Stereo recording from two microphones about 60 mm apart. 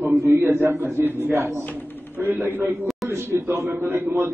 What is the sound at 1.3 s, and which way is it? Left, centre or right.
Speech, right.